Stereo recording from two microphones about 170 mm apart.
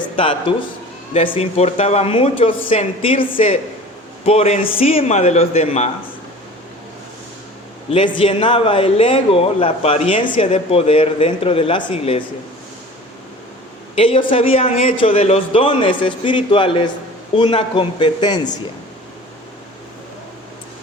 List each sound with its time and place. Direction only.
0.0 s a man's voice: 30° left (ahead or behind)
7.9 s a man's voice: 30° left (ahead or behind)
13.9 s a man's voice: 35° left (ahead or behind)